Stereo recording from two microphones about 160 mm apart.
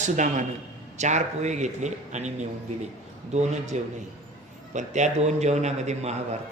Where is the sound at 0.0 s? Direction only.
50° right (ahead or behind).